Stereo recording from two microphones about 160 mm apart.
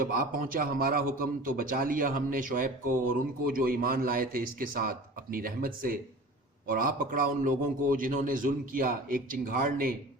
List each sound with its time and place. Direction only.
0.0 s a man's voice: 60° right (ahead or behind)